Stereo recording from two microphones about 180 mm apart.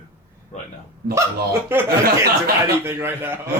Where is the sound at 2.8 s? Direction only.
15° right (ahead or behind).